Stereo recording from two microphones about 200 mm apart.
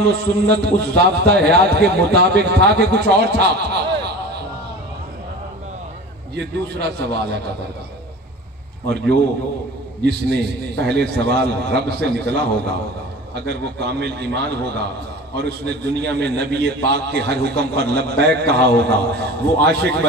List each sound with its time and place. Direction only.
0.0 s a man's voice: 55° right (ahead or behind)
6.3 s a man's voice: 55° right (ahead or behind)
10.0 s a man's voice: 55° right (ahead or behind)